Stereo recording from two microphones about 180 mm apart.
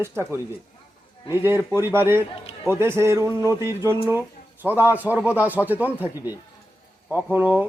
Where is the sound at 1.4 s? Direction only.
15° right (ahead or behind).